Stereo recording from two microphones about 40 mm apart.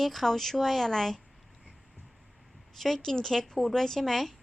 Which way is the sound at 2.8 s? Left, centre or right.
Centre.